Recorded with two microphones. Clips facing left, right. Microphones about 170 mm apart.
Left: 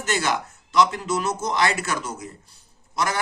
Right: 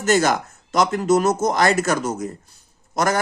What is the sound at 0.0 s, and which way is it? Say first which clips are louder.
Speech: right 7 dB; 45° right (ahead or behind).